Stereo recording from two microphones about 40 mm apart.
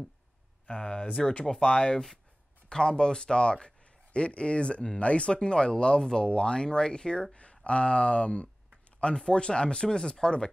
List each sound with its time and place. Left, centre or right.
0.7 s speech: left